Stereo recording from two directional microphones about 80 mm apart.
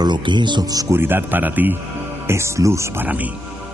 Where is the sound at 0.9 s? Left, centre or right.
Right.